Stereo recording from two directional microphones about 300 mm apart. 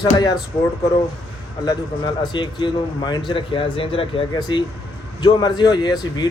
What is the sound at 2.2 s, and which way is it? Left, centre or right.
Speech, centre.